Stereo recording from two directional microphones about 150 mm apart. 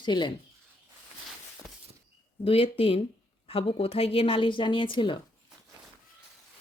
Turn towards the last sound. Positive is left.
turn(degrees=35)  # may be behind; listen again after turning